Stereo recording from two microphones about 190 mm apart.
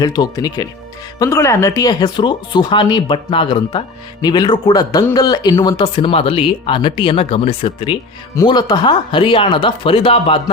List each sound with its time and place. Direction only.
0.0 s speech: 20° left (ahead or behind)